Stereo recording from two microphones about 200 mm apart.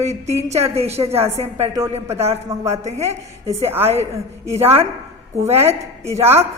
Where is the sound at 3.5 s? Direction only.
10° right (ahead or behind).